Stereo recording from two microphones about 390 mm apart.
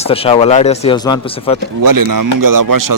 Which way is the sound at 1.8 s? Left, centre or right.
Right.